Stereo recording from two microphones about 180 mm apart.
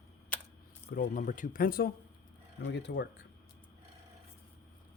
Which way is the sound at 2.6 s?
75° left (ahead or behind).